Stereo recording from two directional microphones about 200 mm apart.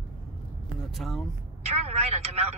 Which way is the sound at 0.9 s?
Centre (ahead or behind).